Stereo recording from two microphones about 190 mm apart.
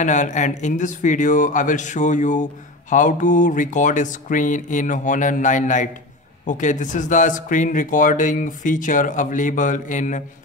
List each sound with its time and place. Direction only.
0.0 s speech: 40° left (ahead or behind)